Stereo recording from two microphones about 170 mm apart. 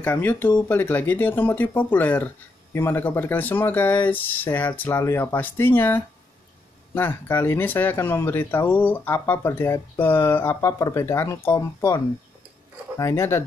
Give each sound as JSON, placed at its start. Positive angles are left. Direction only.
{"t": 0.0, "sound": "speech", "side_deg": 10}